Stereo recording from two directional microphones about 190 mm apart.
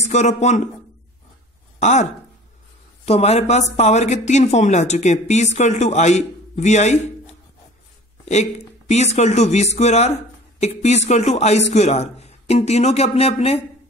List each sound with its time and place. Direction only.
0.0 s speech: 35° left (ahead or behind)
1.8 s speech: 40° left (ahead or behind)
3.1 s speech: 35° left (ahead or behind)
8.3 s speech: 40° left (ahead or behind)